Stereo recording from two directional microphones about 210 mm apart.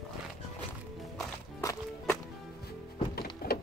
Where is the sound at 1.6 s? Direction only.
15° left (ahead or behind).